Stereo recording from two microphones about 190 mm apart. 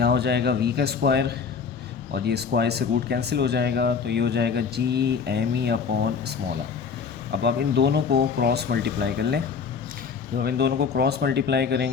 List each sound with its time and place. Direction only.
0.0 s speech: 60° right (ahead or behind)
7.3 s speech: 60° right (ahead or behind)